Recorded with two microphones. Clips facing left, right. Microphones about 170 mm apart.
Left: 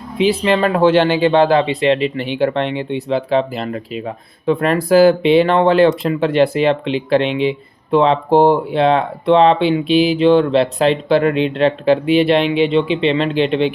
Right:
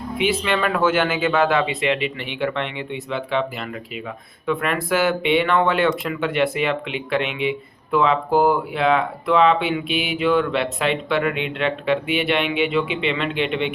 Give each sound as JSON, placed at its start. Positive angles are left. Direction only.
{"t": 0.2, "sound": "speech", "side_deg": 30}